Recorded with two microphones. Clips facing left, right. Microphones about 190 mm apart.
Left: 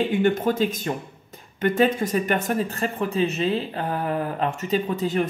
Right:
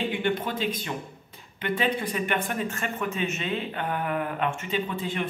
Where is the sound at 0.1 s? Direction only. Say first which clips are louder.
Left 7 dB; 45° left (ahead or behind).